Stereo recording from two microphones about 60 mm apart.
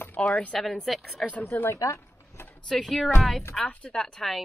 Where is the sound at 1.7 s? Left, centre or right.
Left.